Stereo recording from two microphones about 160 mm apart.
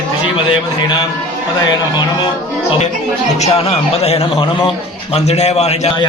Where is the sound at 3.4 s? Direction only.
40° left (ahead or behind).